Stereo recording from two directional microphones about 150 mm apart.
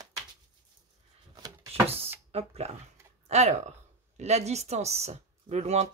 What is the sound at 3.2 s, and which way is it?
Speech, 50° right (ahead or behind).